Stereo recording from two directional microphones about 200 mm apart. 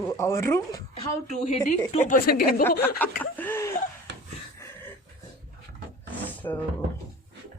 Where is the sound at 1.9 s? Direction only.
35° left (ahead or behind).